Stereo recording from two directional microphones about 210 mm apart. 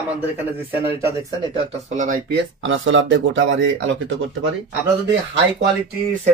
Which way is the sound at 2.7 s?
65° right (ahead or behind).